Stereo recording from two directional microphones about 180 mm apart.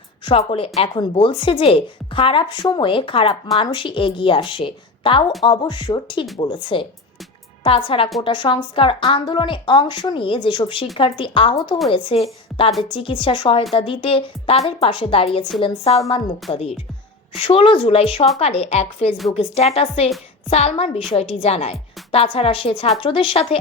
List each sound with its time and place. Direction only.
0.3 s a woman's voice: 30° left (ahead or behind)